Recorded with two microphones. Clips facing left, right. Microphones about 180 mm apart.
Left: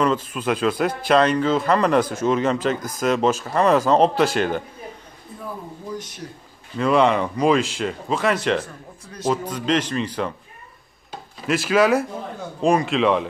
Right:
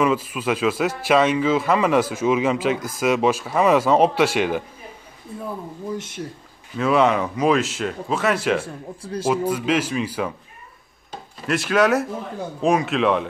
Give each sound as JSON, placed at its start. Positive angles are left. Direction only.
{"t": 0.0, "sound": "speech", "side_deg": -5}
{"t": 6.8, "sound": "speech", "side_deg": 0}
{"t": 8.6, "sound": "speech", "side_deg": -30}
{"t": 9.3, "sound": "a man's voice", "side_deg": -5}